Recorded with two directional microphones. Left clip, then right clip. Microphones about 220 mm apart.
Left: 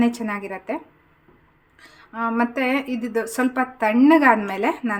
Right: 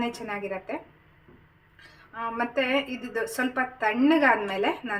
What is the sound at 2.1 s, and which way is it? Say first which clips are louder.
A woman's voice: left 5 dB; 50° left (ahead or behind).